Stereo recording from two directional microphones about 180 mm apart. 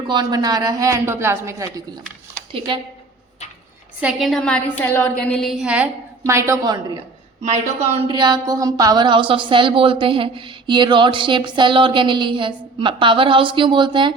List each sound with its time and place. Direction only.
0.1 s a woman's voice: 25° right (ahead or behind)
2.5 s a woman's voice: 30° right (ahead or behind)
4.0 s a woman's voice: centre (ahead or behind); by 7.0 s 20° right (ahead or behind)
7.4 s a woman's voice: 40° right (ahead or behind)